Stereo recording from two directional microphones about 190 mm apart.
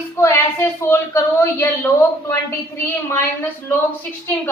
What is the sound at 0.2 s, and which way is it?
A woman's voice, 15° left (ahead or behind).